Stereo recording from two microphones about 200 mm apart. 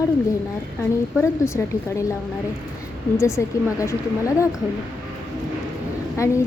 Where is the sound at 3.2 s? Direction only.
15° left (ahead or behind).